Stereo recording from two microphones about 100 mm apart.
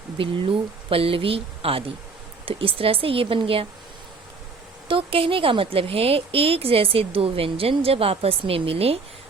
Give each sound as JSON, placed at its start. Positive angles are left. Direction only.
{"t": 0.2, "sound": "a woman's voice", "side_deg": -60}
{"t": 4.9, "sound": "a woman's voice", "side_deg": -65}